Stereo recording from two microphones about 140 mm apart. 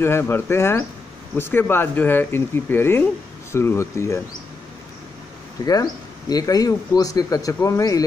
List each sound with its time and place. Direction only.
0.0 s speech: 15° left (ahead or behind)
5.7 s speech: 25° left (ahead or behind)